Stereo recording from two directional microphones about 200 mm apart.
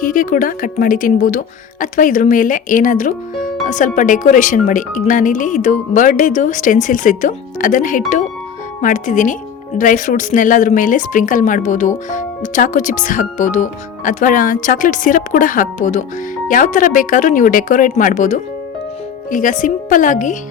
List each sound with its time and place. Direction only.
0.0 s speech: 40° left (ahead or behind)